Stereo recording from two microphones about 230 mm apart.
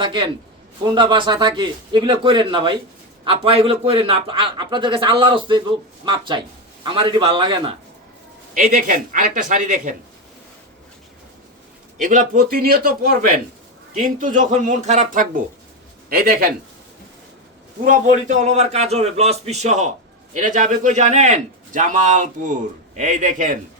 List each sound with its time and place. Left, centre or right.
0.0 s a man's voice: right
8.5 s a man's voice: right
11.9 s a man's voice: right
14.2 s a man's voice: right
17.8 s a man's voice: right